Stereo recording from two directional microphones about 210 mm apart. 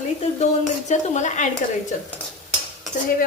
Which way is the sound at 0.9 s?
35° left (ahead or behind).